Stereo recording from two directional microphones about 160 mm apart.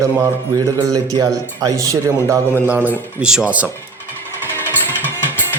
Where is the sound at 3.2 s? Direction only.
5° right (ahead or behind).